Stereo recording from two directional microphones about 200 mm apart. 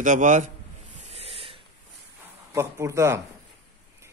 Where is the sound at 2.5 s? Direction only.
15° right (ahead or behind).